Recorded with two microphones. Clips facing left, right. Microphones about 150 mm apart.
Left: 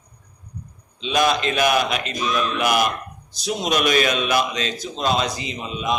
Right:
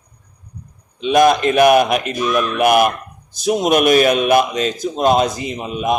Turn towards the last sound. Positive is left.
turn(degrees=-55)  # may be behind; listen again after turning